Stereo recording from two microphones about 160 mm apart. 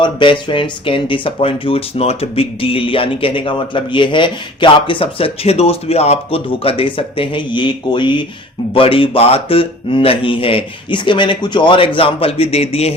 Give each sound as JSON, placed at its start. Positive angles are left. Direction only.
{"t": 0.0, "sound": "speech", "side_deg": 30}